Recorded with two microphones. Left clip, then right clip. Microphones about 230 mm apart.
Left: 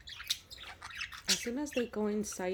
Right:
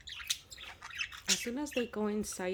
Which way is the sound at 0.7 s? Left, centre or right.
Centre.